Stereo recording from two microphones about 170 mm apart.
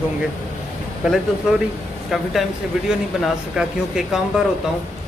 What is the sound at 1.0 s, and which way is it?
Speech, centre (ahead or behind).